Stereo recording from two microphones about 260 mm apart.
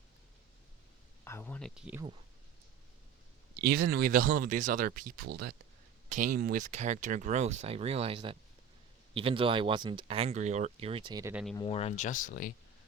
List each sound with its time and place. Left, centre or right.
1.2 s speech: centre
3.8 s speech: right; by 11.4 s centre
11.5 s speech: left